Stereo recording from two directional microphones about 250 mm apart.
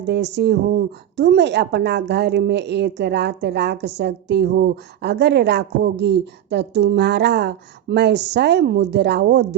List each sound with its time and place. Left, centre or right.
0.0 s speech: right